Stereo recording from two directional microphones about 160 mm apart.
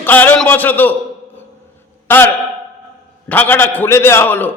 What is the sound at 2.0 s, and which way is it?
A man's voice, 15° left (ahead or behind).